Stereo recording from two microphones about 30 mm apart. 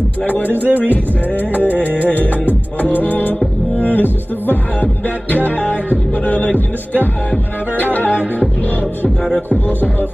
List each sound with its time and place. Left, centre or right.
0.3 s music: left
3.8 s speech: left
5.0 s music: left
9.5 s speech: left